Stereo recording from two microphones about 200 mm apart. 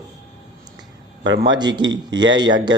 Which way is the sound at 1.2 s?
70° right (ahead or behind).